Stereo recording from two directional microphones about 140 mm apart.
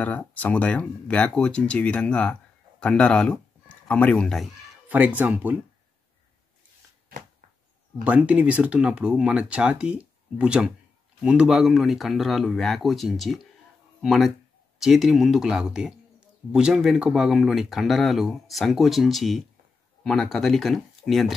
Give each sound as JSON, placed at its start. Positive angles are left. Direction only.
{"t": 0.0, "sound": "speech", "side_deg": 10}
{"t": 4.8, "sound": "speech", "side_deg": -10}
{"t": 7.1, "sound": "a sound", "side_deg": -70}
{"t": 8.0, "sound": "speech", "side_deg": -10}